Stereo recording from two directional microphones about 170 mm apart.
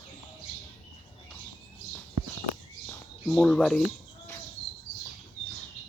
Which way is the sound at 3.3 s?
Centre (ahead or behind).